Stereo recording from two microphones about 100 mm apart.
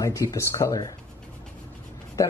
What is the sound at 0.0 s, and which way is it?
Speech, 30° left (ahead or behind).